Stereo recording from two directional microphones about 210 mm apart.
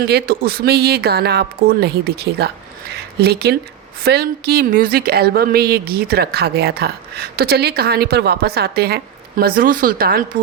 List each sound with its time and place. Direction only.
0.0 s speech: 50° right (ahead or behind)